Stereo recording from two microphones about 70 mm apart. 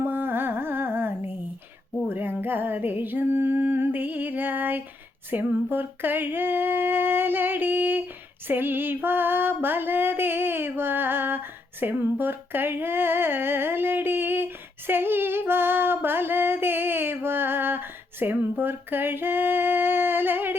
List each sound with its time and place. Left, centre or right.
0.0 s carnatic music: right
2.0 s a sound: right
8.4 s female singing: right